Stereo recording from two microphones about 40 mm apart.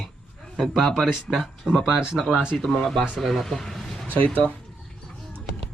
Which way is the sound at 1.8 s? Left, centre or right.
Centre.